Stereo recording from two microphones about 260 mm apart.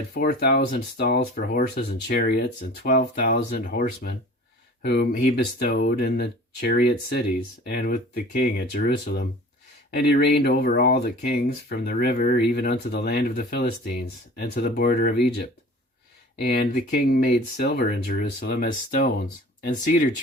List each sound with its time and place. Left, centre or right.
0.1 s speech: left
16.4 s speech: left